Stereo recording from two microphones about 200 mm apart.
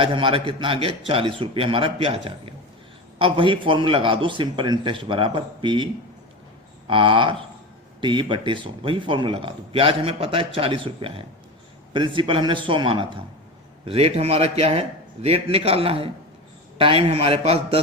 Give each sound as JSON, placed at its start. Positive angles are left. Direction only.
{"t": 0.0, "sound": "speech", "side_deg": -25}